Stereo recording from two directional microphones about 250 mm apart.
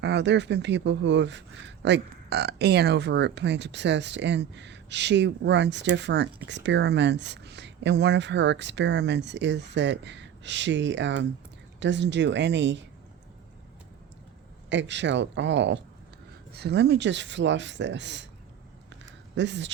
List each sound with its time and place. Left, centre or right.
0.0 s speech: right
14.7 s speech: right
19.4 s speech: right